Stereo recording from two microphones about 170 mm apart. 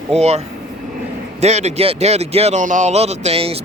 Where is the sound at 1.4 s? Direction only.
40° right (ahead or behind).